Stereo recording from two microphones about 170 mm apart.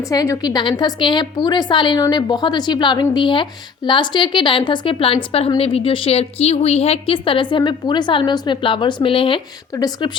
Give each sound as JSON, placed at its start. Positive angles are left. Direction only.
{"t": 0.1, "sound": "a woman's voice", "side_deg": 20}